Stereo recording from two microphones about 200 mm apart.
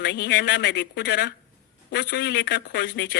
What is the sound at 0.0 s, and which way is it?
A man's voice, 55° left (ahead or behind).